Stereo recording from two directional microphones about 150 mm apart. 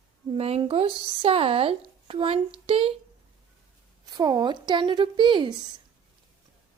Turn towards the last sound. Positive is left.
turn(degrees=-30)  # may be behind; listen again after turning